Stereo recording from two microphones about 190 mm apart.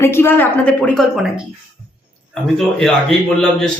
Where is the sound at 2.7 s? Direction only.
Centre (ahead or behind).